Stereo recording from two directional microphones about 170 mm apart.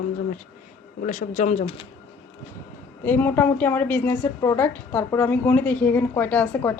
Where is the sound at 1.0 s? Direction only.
45° left (ahead or behind).